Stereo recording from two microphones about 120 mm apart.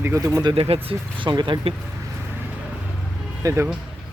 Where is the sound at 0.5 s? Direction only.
55° right (ahead or behind).